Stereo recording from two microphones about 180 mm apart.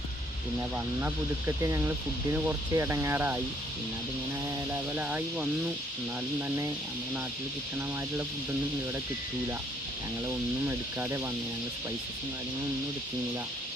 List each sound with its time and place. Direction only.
1.0 s speech: 15° right (ahead or behind)
4.7 s speech: 10° right (ahead or behind)
10.7 s speech: 15° right (ahead or behind)